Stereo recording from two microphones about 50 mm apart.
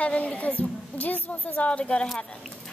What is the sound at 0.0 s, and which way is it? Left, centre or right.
A woman's voice, left.